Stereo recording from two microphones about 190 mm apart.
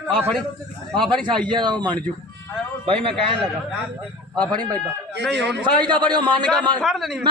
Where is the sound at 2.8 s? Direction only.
30° right (ahead or behind).